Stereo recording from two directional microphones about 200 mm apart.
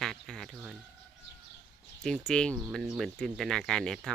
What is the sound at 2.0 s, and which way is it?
Speech, 5° left (ahead or behind).